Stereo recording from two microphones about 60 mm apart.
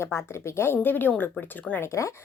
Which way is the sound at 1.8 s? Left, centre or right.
Left.